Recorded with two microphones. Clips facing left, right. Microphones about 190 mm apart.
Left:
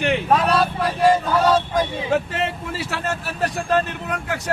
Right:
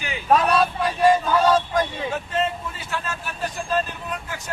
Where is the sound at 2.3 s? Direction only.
75° left (ahead or behind).